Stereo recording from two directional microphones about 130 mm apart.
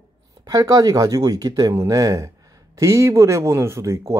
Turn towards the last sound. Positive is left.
turn(degrees=-20)  # may be behind; listen again after turning